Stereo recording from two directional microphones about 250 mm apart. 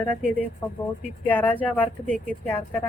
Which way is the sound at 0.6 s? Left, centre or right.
Centre.